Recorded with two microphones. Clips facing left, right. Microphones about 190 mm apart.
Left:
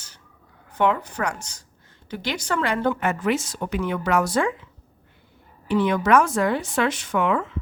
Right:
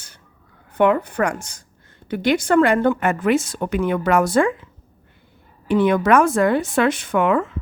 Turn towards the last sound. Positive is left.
turn(degrees=-50)  # may be behind; listen again after turning